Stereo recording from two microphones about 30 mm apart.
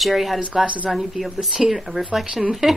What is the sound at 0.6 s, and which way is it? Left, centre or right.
Speech, right.